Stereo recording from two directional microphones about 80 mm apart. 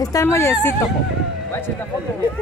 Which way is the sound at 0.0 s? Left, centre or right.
Left.